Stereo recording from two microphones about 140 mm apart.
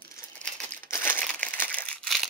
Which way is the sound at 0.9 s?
15° left (ahead or behind).